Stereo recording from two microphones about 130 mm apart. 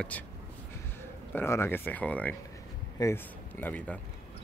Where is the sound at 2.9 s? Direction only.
20° left (ahead or behind).